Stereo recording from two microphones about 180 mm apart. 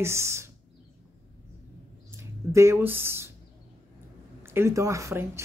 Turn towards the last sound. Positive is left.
turn(degrees=-15)  # may be behind; listen again after turning